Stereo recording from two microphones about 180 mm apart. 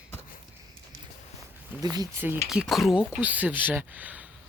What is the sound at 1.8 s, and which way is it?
Speech, 20° right (ahead or behind).